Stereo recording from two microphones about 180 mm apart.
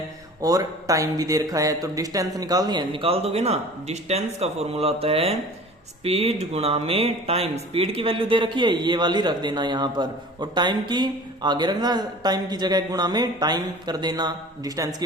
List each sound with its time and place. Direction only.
0.4 s speech: 20° right (ahead or behind)